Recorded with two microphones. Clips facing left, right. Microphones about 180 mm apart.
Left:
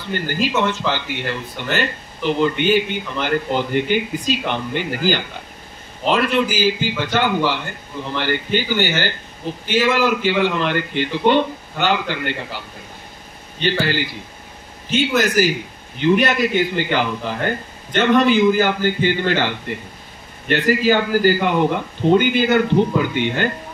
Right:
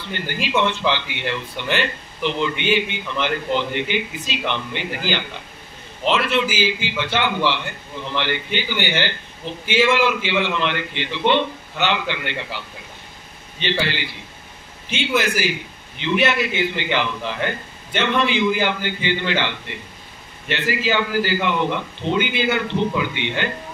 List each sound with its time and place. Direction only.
0.1 s speech: 45° left (ahead or behind)